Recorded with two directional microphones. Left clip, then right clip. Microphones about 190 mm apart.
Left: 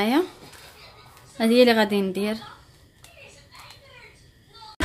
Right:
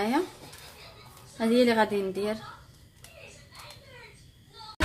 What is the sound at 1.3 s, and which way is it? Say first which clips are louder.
A woman's voice: left 5 dB; 40° left (ahead or behind).